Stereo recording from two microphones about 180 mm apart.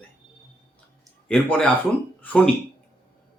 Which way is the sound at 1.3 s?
5° left (ahead or behind).